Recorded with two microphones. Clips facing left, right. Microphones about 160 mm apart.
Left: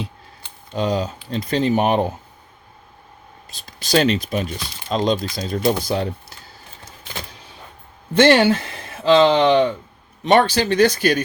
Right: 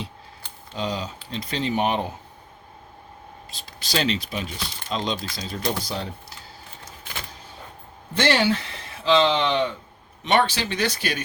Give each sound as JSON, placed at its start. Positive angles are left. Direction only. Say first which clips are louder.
{"t": 0.8, "sound": "speech", "louder": "left 7 dB", "side_deg": 45}
{"t": 3.6, "sound": "speech", "louder": "left 8 dB", "side_deg": 45}
{"t": 8.1, "sound": "speech", "louder": "left 8 dB", "side_deg": 55}
{"t": 10.2, "sound": "speech", "louder": "left 6 dB", "side_deg": 40}